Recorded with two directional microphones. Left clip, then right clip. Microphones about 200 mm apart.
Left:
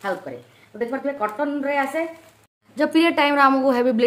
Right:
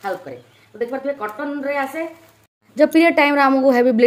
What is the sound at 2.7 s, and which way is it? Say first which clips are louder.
A woman's voice: right 5 dB; 20° right (ahead or behind).